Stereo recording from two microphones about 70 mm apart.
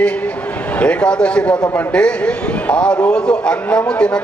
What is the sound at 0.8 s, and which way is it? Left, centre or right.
A man's voice, centre.